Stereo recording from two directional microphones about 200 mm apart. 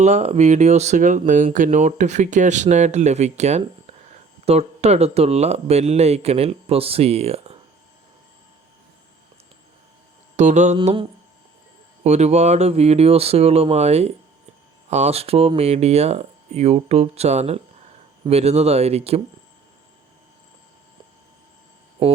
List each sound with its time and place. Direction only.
0.0 s speech: 35° right (ahead or behind)
10.3 s mantra: 35° right (ahead or behind)
10.8 s mantra: 25° right (ahead or behind)
12.0 s speech: 35° right (ahead or behind)
22.0 s mantra: 30° right (ahead or behind)